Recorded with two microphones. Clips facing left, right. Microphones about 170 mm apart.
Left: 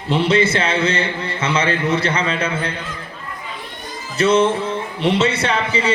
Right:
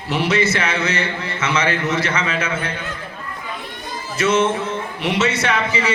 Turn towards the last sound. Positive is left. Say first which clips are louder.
# left 1 dB
turn(degrees=30)  # may be behind; listen again after turning